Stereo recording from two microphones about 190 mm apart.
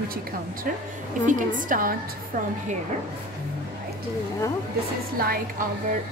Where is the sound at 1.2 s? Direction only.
45° right (ahead or behind).